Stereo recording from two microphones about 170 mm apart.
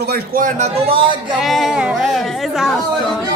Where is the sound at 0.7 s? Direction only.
35° right (ahead or behind).